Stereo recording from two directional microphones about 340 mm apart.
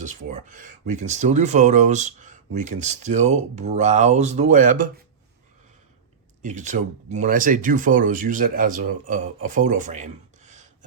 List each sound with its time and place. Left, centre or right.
0.0 s speech: right
6.4 s speech: right